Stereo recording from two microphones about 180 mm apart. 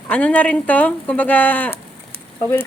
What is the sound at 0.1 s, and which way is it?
Speech, 5° left (ahead or behind).